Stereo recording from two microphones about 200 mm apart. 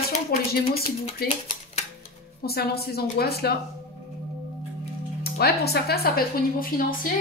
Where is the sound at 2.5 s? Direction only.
50° left (ahead or behind).